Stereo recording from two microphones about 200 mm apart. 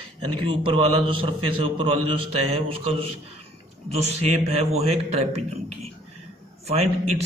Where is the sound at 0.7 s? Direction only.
30° right (ahead or behind).